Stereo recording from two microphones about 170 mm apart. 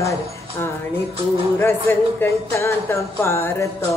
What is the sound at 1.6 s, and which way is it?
Speech, 15° left (ahead or behind).